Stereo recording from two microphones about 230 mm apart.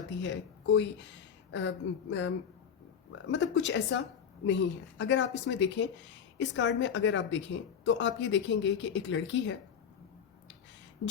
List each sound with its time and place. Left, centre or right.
0.2 s speech: left